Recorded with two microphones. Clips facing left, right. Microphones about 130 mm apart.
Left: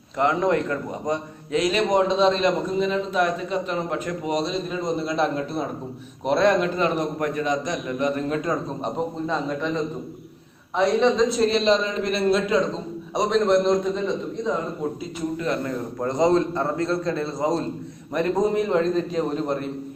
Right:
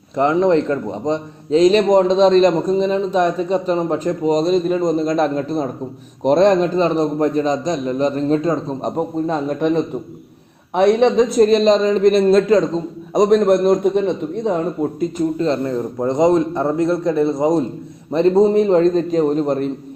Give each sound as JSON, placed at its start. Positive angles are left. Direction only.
{"t": 0.2, "sound": "a man's voice", "side_deg": -20}
{"t": 9.6, "sound": "a man's voice", "side_deg": -60}
{"t": 13.3, "sound": "a man's voice", "side_deg": -50}
{"t": 15.4, "sound": "a man's voice", "side_deg": -30}